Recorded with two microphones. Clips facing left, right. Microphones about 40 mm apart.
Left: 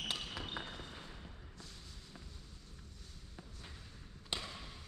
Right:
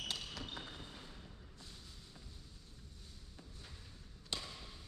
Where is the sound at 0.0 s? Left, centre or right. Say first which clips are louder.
Left 3 dB; left.